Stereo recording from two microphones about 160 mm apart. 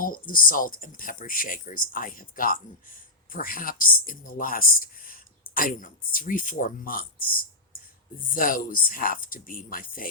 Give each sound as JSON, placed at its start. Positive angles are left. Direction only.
{"t": 0.0, "sound": "speech", "side_deg": 60}
{"t": 8.3, "sound": "speech", "side_deg": 60}